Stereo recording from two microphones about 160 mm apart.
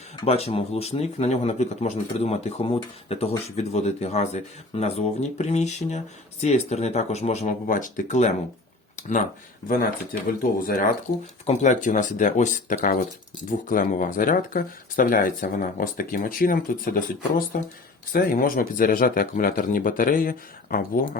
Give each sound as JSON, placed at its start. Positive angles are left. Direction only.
{"t": 0.3, "sound": "speech", "side_deg": 40}
{"t": 9.6, "sound": "speech", "side_deg": 65}
{"t": 11.4, "sound": "speech", "side_deg": 45}